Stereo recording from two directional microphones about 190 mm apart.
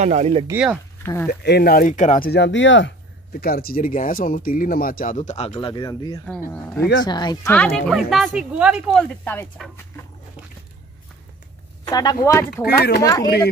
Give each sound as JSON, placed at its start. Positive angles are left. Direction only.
{"t": 0.0, "sound": "speech", "side_deg": -35}
{"t": 0.5, "sound": "speech", "side_deg": -10}
{"t": 1.0, "sound": "speech", "side_deg": 15}
{"t": 1.4, "sound": "speech", "side_deg": 55}
{"t": 3.3, "sound": "speech", "side_deg": 55}
{"t": 5.5, "sound": "speech", "side_deg": 25}
{"t": 6.5, "sound": "speech", "side_deg": 10}
{"t": 7.1, "sound": "speech", "side_deg": 20}
{"t": 7.4, "sound": "speech", "side_deg": 5}
{"t": 9.2, "sound": "speech", "side_deg": 10}
{"t": 11.8, "sound": "speech", "side_deg": 20}
{"t": 12.6, "sound": "speech", "side_deg": 55}
{"t": 13.0, "sound": "speech", "side_deg": 20}